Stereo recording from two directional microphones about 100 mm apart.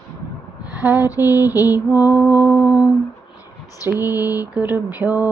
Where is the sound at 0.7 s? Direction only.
20° right (ahead or behind).